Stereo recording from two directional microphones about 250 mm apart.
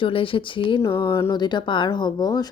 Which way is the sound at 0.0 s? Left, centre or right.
Left.